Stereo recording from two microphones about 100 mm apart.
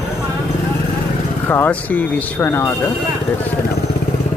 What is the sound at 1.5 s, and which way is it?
Speech, 20° left (ahead or behind).